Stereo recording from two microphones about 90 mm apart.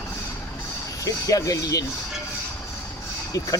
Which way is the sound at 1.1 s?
40° left (ahead or behind).